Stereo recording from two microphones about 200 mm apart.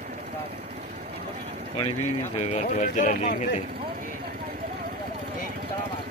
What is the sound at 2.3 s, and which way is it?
Speech, 35° left (ahead or behind).